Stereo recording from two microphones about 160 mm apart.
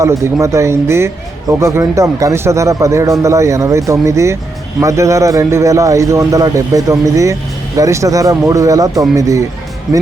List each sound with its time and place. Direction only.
0.0 s speech: 20° right (ahead or behind)
9.9 s speech: centre (ahead or behind)